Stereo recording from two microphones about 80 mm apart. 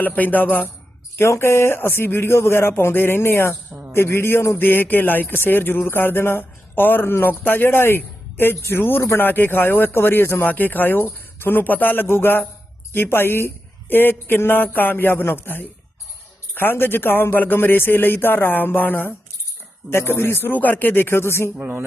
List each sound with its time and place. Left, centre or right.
0.0 s a man's voice: left
1.2 s a man's voice: left
21.6 s speech: right